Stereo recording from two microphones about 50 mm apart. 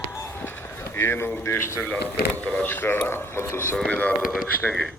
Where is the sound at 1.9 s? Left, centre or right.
Left.